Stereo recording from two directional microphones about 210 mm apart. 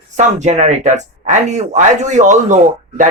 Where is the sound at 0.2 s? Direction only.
35° right (ahead or behind).